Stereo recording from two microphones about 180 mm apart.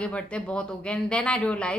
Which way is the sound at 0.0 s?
5° left (ahead or behind).